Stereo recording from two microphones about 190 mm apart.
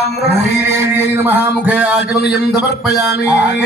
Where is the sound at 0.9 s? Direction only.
10° right (ahead or behind).